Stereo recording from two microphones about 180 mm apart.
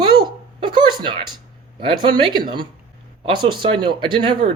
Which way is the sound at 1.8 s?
25° right (ahead or behind).